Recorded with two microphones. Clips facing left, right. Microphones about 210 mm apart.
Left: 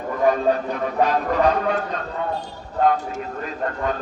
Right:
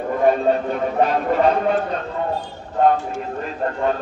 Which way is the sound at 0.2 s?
25° right (ahead or behind).